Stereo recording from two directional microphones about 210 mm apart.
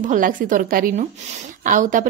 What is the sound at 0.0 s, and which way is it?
A woman's voice, 40° right (ahead or behind).